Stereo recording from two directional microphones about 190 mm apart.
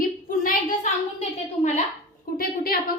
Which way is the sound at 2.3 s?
50° left (ahead or behind).